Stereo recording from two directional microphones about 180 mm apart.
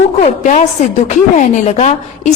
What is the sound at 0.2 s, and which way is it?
A woman's voice, 40° left (ahead or behind).